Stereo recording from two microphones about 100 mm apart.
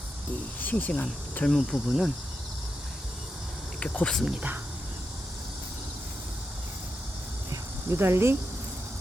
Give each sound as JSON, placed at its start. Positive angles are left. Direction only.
{"t": 0.6, "sound": "speech", "side_deg": 15}
{"t": 1.5, "sound": "speech", "side_deg": 0}
{"t": 3.8, "sound": "speech", "side_deg": 10}
{"t": 7.5, "sound": "a sound", "side_deg": -25}